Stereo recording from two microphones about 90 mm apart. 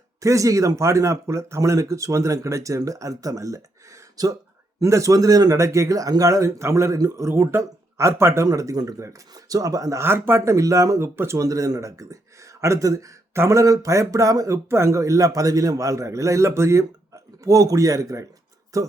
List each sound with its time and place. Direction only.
0.2 s speech: 35° right (ahead or behind)
8.4 s speech: 40° right (ahead or behind)
10.0 s speech: 25° right (ahead or behind)